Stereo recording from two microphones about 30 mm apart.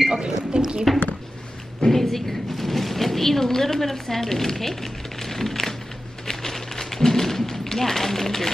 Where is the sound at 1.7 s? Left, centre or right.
Centre.